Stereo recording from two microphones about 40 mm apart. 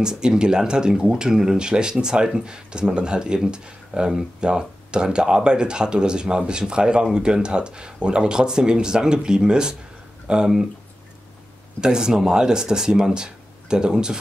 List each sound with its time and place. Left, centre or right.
0.0 s speech: centre
11.8 s speech: centre